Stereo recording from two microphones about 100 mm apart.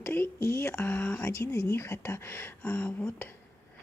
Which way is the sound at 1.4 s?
25° left (ahead or behind).